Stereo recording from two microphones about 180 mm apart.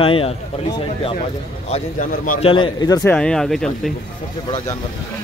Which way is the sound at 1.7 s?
45° left (ahead or behind).